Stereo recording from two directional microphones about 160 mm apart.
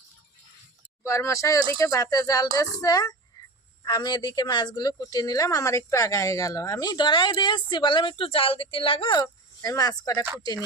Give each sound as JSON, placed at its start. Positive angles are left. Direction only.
{"t": 1.0, "sound": "a woman's voice", "side_deg": 20}